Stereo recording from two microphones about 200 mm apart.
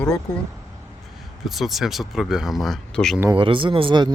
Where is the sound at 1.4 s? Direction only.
Centre (ahead or behind).